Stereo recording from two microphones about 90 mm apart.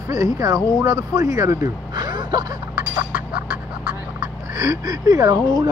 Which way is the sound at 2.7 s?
15° right (ahead or behind).